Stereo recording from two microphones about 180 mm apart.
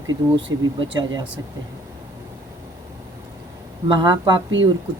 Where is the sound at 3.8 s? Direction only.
20° right (ahead or behind).